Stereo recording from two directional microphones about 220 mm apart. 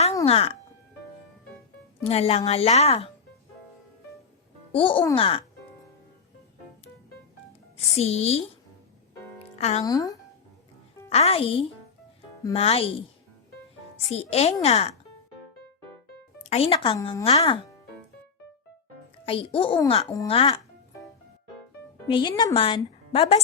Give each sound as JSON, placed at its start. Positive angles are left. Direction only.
{"t": 0.3, "sound": "a woman's voice", "side_deg": 25}
{"t": 2.0, "sound": "a woman's voice", "side_deg": 25}
{"t": 4.7, "sound": "a woman's voice", "side_deg": 25}
{"t": 7.8, "sound": "a woman's voice", "side_deg": 30}
{"t": 9.4, "sound": "music", "side_deg": 30}
{"t": 9.8, "sound": "speech", "side_deg": 15}
{"t": 11.1, "sound": "a woman's voice", "side_deg": 25}
{"t": 14.1, "sound": "a woman's voice", "side_deg": 30}
{"t": 16.5, "sound": "a woman's voice", "side_deg": 25}
{"t": 17.0, "sound": "speech", "side_deg": 15}
{"t": 17.2, "sound": "a woman's voice", "side_deg": 25}
{"t": 19.2, "sound": "a woman's voice", "side_deg": 25}
{"t": 22.0, "sound": "a woman's voice", "side_deg": 20}